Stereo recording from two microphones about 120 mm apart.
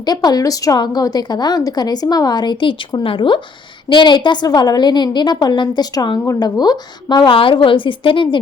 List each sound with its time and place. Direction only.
0.0 s a woman's voice: 35° left (ahead or behind)